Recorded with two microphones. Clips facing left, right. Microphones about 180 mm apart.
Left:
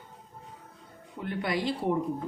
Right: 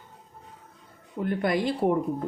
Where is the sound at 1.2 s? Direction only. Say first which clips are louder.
Right 5 dB; 50° right (ahead or behind).